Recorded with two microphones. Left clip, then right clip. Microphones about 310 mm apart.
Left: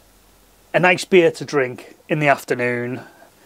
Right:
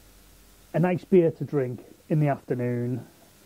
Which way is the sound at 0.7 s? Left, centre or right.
Centre.